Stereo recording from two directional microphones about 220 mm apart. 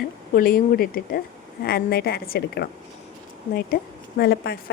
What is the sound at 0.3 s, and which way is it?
A woman's voice, 40° left (ahead or behind).